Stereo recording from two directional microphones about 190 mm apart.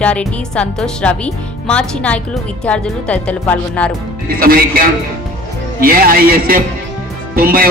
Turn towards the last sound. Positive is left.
turn(degrees=-50)  # may be behind; listen again after turning